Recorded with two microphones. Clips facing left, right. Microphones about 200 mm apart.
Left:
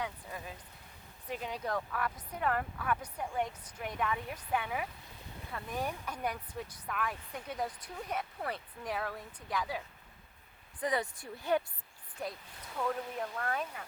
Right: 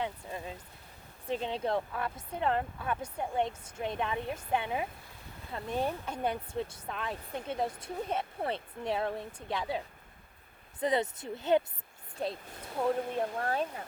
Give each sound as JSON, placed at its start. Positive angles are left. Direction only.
{"t": 0.0, "sound": "speech", "side_deg": -25}